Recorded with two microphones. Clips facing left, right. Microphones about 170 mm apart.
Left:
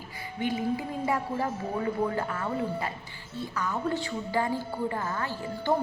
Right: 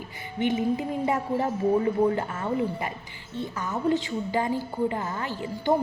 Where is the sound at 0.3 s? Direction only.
25° right (ahead or behind).